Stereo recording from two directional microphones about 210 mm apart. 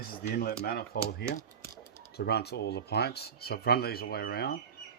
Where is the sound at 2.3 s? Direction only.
50° left (ahead or behind).